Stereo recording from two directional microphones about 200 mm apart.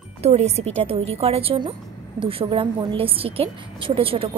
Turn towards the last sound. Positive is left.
turn(degrees=-30)  # may be behind; listen again after turning